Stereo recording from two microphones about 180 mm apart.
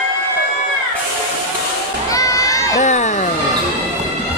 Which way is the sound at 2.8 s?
40° left (ahead or behind).